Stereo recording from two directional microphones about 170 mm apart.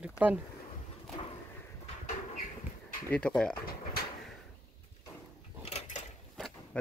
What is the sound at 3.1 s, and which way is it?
Speech, 5° left (ahead or behind).